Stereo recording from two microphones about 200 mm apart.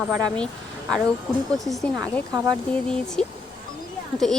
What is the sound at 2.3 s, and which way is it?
Speech, 20° right (ahead or behind).